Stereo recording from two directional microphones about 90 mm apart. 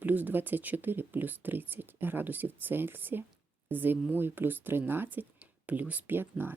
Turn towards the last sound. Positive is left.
turn(degrees=-25)  # may be behind; listen again after turning